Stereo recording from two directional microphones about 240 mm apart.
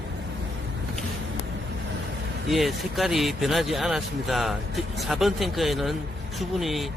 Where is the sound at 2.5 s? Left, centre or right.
Centre.